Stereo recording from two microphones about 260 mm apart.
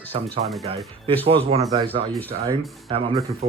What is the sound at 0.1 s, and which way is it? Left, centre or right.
Speech, right.